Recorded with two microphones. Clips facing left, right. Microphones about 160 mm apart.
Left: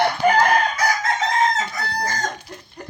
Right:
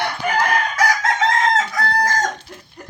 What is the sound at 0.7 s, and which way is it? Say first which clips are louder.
Chicken: right 3 dB; 90° right.